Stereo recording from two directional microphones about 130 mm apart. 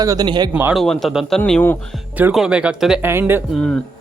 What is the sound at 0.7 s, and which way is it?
Speech, centre (ahead or behind).